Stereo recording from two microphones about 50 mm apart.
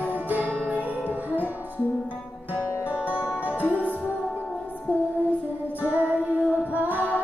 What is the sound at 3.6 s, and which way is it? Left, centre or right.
Music, right.